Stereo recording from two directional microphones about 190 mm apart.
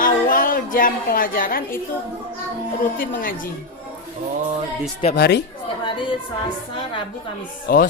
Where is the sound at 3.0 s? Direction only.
45° left (ahead or behind).